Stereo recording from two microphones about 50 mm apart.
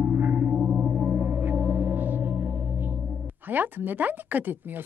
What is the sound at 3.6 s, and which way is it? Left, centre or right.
Speech, right.